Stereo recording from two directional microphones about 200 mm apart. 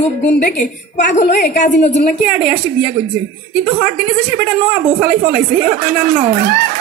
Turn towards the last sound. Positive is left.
turn(degrees=-45)  # may be behind; listen again after turning